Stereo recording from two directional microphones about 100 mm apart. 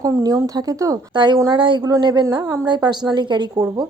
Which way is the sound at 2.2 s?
35° right (ahead or behind).